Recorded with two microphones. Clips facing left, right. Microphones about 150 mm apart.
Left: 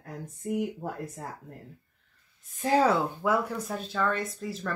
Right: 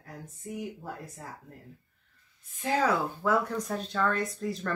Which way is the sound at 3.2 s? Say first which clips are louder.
Even; 10° left (ahead or behind).